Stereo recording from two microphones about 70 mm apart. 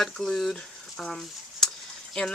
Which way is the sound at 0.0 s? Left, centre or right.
Centre.